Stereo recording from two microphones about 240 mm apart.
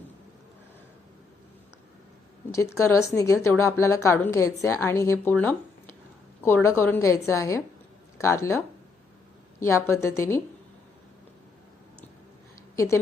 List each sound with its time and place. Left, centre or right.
2.7 s a woman's voice: centre
12.7 s a woman's voice: centre